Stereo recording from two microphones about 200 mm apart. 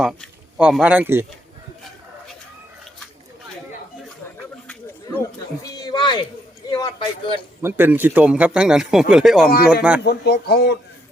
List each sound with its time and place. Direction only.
0.0 s a man's voice: centre (ahead or behind)
4.7 s a sound: 10° left (ahead or behind)
6.7 s a man's voice: 20° left (ahead or behind)
7.6 s speech: 10° right (ahead or behind)
10.0 s speech: 55° left (ahead or behind)